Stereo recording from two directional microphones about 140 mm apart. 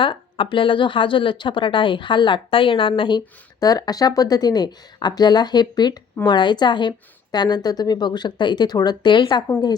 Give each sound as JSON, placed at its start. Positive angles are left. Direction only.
{"t": 0.0, "sound": "speech", "side_deg": 35}